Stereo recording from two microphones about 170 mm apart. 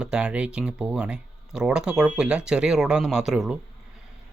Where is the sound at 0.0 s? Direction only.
5° right (ahead or behind).